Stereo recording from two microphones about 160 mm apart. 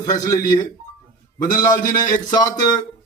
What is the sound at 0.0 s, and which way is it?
Speech, 20° left (ahead or behind).